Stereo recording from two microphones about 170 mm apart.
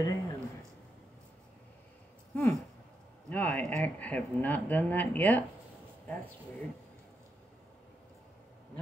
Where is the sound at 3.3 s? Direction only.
10° left (ahead or behind).